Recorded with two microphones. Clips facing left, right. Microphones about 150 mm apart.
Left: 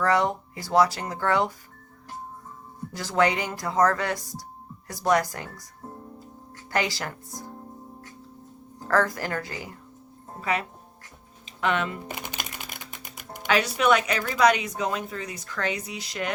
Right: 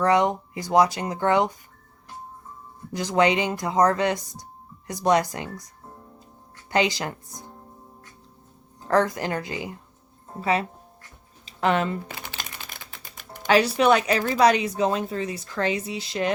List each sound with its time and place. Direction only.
0.0 s speech: 20° right (ahead or behind)
2.9 s speech: 20° right (ahead or behind)
6.7 s speech: 20° right (ahead or behind)
8.9 s speech: 20° right (ahead or behind)
10.4 s a woman's voice: 30° right (ahead or behind)
12.0 s music: 15° left (ahead or behind)
13.5 s a woman's voice: 30° right (ahead or behind)